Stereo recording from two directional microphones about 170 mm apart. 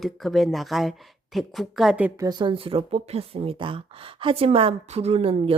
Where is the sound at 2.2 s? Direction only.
25° right (ahead or behind).